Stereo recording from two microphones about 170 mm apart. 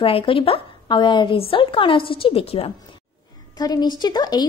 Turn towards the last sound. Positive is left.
turn(degrees=25)  # may be behind; listen again after turning